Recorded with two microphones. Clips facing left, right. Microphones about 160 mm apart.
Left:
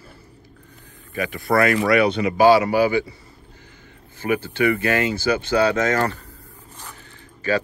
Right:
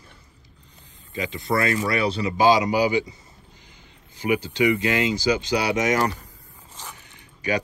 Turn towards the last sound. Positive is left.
turn(degrees=-15)  # may be behind; listen again after turning